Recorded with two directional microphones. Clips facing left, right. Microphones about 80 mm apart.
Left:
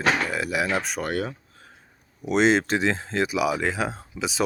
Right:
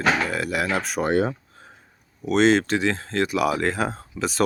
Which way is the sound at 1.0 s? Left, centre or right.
Right.